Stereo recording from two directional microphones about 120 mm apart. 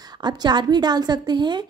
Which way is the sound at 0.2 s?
35° right (ahead or behind).